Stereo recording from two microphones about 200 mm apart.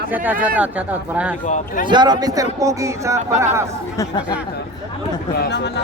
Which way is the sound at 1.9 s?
20° right (ahead or behind).